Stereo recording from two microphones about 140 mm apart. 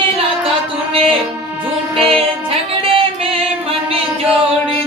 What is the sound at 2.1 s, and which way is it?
Music, 40° right (ahead or behind).